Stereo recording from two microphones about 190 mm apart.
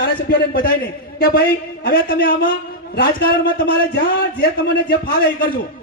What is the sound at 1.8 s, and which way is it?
A man's voice, 50° left (ahead or behind).